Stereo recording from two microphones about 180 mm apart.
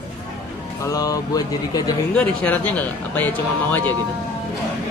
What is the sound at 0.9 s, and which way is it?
Speech, 20° left (ahead or behind).